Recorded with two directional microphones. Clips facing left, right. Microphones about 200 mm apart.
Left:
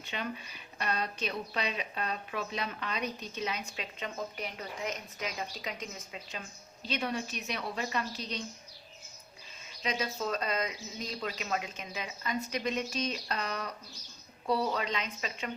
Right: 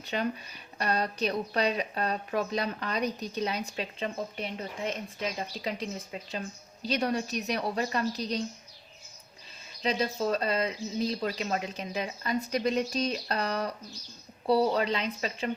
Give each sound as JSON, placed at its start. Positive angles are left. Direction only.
{"t": 0.0, "sound": "speech", "side_deg": -40}
{"t": 9.8, "sound": "speech", "side_deg": -30}